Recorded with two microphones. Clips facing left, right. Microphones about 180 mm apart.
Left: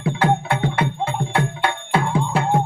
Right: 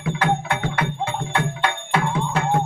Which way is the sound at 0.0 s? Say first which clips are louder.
Left 3 dB; 30° left (ahead or behind).